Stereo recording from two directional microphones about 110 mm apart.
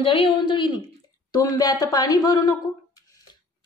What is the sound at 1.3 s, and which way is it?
A woman's voice, 35° left (ahead or behind).